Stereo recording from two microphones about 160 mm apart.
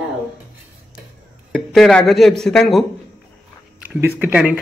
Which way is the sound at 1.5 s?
Centre (ahead or behind).